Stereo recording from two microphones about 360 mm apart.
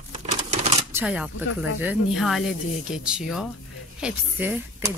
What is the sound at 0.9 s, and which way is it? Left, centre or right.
Speech, centre.